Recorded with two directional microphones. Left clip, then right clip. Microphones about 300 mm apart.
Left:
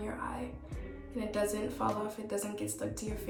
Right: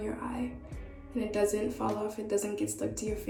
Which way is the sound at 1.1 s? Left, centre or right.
Left.